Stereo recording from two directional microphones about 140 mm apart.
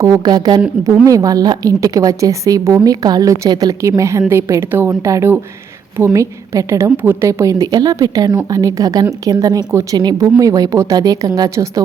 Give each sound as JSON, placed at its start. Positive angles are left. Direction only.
{"t": 0.0, "sound": "a woman's voice", "side_deg": -30}